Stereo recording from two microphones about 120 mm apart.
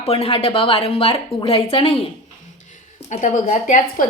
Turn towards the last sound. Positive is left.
turn(degrees=90)